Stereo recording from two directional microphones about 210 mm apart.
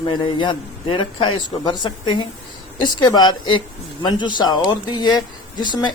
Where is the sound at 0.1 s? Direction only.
20° left (ahead or behind).